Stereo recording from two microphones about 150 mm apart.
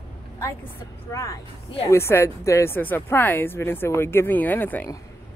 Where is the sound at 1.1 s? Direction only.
20° left (ahead or behind).